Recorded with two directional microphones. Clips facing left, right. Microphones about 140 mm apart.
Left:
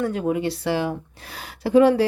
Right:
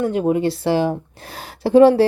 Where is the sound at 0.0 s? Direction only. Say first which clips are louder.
Right 5 dB; 25° right (ahead or behind).